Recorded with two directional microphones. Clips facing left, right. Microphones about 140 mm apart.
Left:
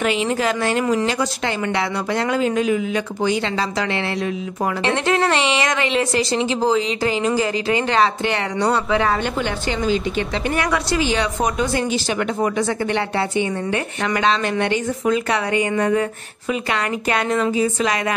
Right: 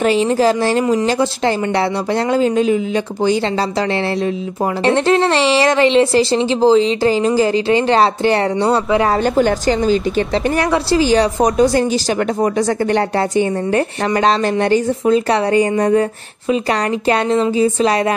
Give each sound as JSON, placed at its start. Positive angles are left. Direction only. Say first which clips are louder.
{"t": 0.0, "sound": "speech", "louder": "right 6 dB", "side_deg": -35}
{"t": 4.8, "sound": "speech", "louder": "right 6 dB", "side_deg": -30}
{"t": 12.9, "sound": "speech", "louder": "right 5 dB", "side_deg": -40}
{"t": 17.1, "sound": "speech", "louder": "right 4 dB", "side_deg": -30}